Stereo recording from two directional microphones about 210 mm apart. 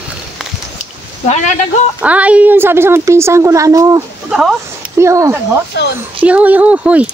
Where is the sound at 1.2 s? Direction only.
35° left (ahead or behind).